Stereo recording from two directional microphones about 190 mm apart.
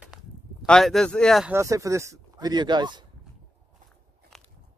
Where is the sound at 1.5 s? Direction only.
15° right (ahead or behind).